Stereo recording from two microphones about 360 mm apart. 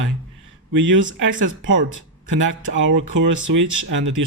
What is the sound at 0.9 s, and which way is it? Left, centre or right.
Speech, right.